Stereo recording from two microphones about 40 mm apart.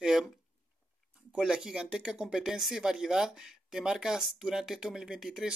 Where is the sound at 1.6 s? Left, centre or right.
Right.